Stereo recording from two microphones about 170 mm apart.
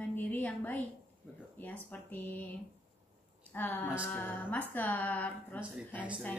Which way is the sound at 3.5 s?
10° left (ahead or behind).